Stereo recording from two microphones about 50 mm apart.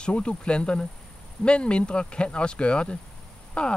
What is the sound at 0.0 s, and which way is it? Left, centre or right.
Speech, centre.